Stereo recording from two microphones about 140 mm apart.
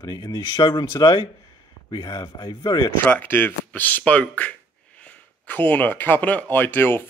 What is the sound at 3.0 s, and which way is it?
Speech, 15° left (ahead or behind).